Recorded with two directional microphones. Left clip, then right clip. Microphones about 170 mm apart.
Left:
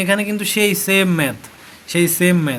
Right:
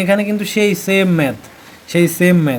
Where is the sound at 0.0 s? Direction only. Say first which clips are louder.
Right 3 dB; 15° right (ahead or behind).